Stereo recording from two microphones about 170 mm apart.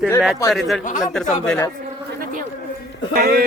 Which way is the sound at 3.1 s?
65° right (ahead or behind).